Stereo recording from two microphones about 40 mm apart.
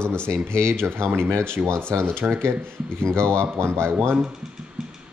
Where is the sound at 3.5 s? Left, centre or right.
Right.